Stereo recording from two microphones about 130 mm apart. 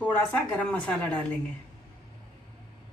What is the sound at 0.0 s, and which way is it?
A woman's voice, 10° left (ahead or behind).